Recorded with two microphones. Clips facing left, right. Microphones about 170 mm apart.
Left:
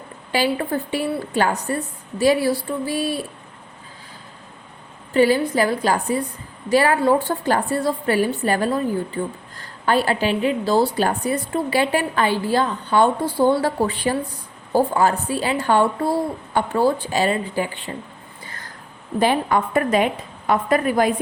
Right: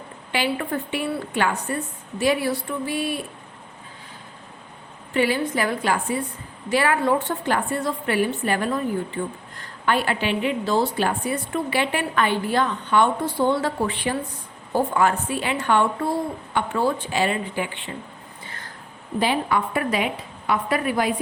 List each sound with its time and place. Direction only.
0.3 s a woman's voice: 35° left (ahead or behind)
5.1 s a woman's voice: 40° left (ahead or behind)
19.2 s a woman's voice: 45° left (ahead or behind)